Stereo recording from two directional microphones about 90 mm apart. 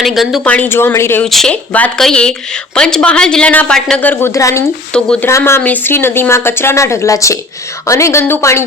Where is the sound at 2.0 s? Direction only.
10° left (ahead or behind).